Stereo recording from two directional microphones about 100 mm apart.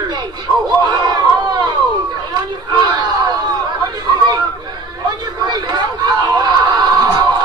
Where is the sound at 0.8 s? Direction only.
40° right (ahead or behind).